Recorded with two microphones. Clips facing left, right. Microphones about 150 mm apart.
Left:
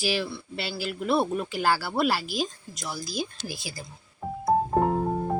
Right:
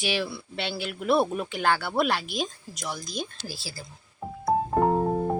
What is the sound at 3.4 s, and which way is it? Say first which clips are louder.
Speech: left 2 dB; 20° left (ahead or behind).